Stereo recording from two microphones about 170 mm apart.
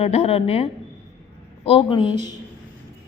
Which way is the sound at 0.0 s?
40° left (ahead or behind).